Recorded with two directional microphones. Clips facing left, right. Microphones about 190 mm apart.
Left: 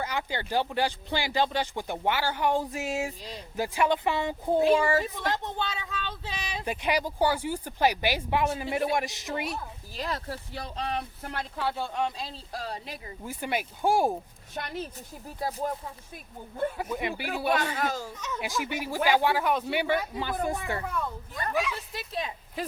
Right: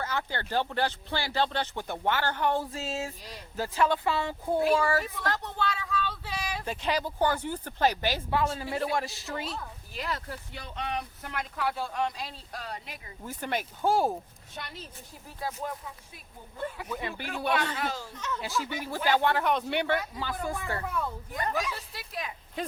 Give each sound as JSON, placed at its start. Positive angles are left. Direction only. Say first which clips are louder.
{"t": 0.0, "sound": "speech", "louder": "left 1 dB", "side_deg": 15}
{"t": 9.9, "sound": "speech", "louder": "left 2 dB", "side_deg": 35}
{"t": 13.2, "sound": "speech", "louder": "left 1 dB", "side_deg": 10}
{"t": 14.5, "sound": "a child's voice", "louder": "left 8 dB", "side_deg": 55}
{"t": 15.4, "sound": "speech", "louder": "left 4 dB", "side_deg": 35}
{"t": 16.9, "sound": "speech", "louder": "left 4 dB", "side_deg": 15}
{"t": 17.7, "sound": "a child's voice", "louder": "left 3 dB", "side_deg": 45}
{"t": 18.3, "sound": "speech", "louder": "even", "side_deg": 15}
{"t": 20.1, "sound": "speech", "louder": "left 4 dB", "side_deg": 20}
{"t": 20.8, "sound": "a woman's voice", "louder": "even", "side_deg": -5}
{"t": 21.9, "sound": "speech", "louder": "left 4 dB", "side_deg": 25}
{"t": 22.6, "sound": "speech", "louder": "even", "side_deg": 5}